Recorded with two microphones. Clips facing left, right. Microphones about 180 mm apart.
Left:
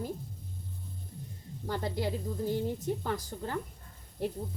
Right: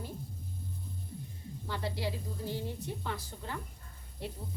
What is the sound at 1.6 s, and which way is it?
A woman's voice, 45° left (ahead or behind).